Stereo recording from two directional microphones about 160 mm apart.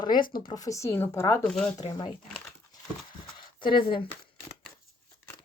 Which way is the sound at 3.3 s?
30° left (ahead or behind).